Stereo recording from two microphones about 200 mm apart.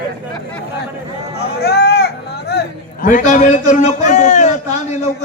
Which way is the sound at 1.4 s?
50° left (ahead or behind).